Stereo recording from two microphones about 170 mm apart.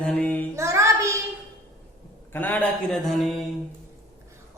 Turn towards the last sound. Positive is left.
turn(degrees=0)  # may be behind; listen again after turning